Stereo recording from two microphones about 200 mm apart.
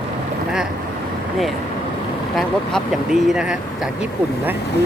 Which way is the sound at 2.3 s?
Centre (ahead or behind).